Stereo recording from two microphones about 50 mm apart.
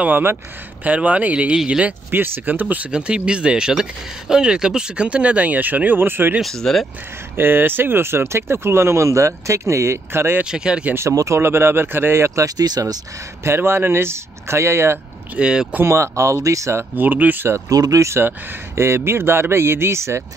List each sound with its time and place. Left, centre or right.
0.8 s speech: right
2.0 s speech: right
2.9 s speech: right
6.4 s speech: centre
7.3 s speech: right
10.4 s speech: centre
11.0 s speech: right
11.4 s speech: right
15.3 s speech: centre
15.8 s speech: right
16.9 s speech: right
17.9 s speech: right
18.2 s speech: right